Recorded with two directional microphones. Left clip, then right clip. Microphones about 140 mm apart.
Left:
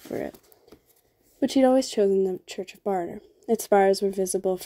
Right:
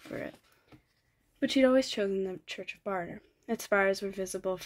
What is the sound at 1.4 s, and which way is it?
Speech, 45° left (ahead or behind).